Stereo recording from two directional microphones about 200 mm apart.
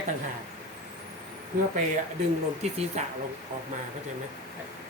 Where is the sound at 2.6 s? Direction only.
30° right (ahead or behind).